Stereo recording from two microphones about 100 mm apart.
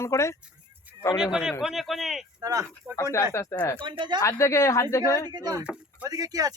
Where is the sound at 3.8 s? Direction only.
55° right (ahead or behind).